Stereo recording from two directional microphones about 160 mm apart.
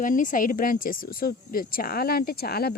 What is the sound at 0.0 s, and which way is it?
Speech, 55° left (ahead or behind).